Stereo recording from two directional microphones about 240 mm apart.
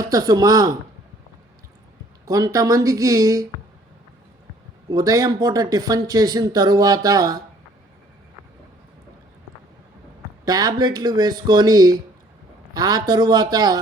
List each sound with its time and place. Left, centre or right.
0.0 s speech: centre
2.2 s speech: centre
4.9 s speech: centre
10.4 s speech: centre